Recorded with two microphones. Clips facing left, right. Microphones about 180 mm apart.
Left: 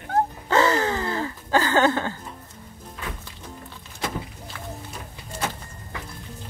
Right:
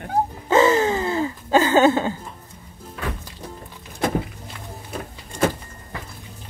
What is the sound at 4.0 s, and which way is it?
Vehicle, 55° right (ahead or behind).